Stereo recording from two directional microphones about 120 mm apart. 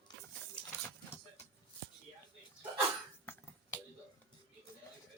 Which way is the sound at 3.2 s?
20° left (ahead or behind).